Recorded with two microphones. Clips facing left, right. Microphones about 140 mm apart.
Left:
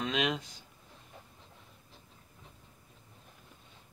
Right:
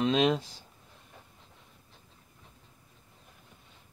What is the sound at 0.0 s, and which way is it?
Speech, 30° right (ahead or behind).